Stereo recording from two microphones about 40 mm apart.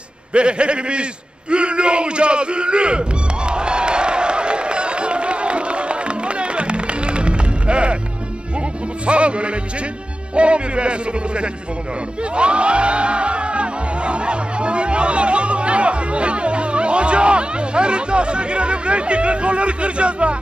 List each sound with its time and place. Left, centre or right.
0.3 s music: right
1.5 s a sound: right
9.0 s music: right